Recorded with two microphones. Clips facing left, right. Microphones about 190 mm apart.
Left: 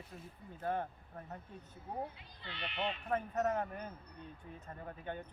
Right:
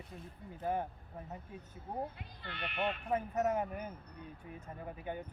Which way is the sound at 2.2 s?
55° right (ahead or behind).